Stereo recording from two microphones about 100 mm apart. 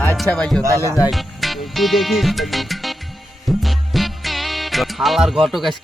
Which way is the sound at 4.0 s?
Centre (ahead or behind).